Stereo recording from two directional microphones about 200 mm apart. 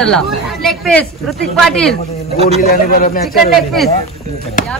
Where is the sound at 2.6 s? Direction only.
45° left (ahead or behind).